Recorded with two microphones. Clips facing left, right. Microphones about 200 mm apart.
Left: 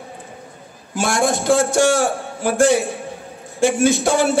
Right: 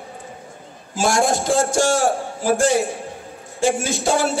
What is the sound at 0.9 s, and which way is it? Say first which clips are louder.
A man's voice: even; 60° left (ahead or behind).